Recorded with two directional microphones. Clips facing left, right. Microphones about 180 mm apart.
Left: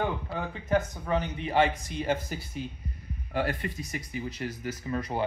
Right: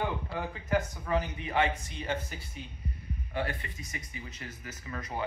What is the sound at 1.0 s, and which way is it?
Speech, 30° left (ahead or behind).